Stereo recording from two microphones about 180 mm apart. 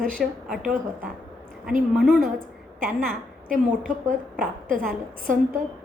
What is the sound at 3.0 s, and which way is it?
A woman's voice, 50° right (ahead or behind).